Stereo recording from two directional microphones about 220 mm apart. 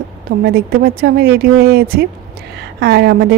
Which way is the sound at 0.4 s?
45° right (ahead or behind).